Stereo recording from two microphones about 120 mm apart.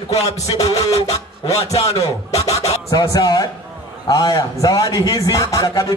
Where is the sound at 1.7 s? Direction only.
30° left (ahead or behind).